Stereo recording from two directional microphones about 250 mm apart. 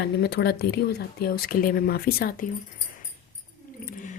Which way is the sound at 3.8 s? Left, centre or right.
Left.